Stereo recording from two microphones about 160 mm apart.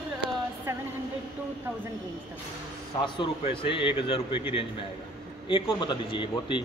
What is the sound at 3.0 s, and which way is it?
A man's voice, 30° left (ahead or behind).